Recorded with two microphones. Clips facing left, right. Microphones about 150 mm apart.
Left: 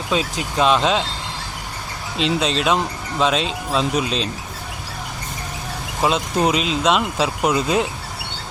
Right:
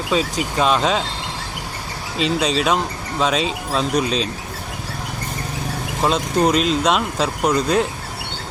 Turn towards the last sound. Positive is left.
turn(degrees=5)  # may be behind; listen again after turning